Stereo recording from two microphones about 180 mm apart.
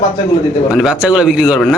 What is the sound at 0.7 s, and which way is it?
Speech, 5° right (ahead or behind).